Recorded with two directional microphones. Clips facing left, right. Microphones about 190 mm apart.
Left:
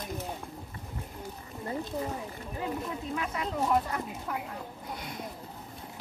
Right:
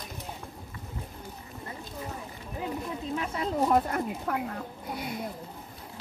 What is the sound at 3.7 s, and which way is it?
Speech, 50° right (ahead or behind).